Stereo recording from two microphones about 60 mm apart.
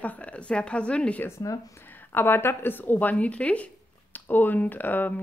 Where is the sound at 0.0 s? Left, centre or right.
Left.